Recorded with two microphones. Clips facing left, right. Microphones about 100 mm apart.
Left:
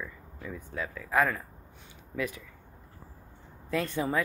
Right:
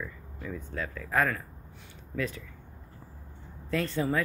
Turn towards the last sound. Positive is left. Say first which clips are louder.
# even
turn(degrees=15)  # may be behind; listen again after turning